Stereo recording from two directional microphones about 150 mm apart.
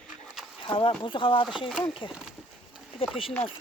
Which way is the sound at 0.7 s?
35° left (ahead or behind).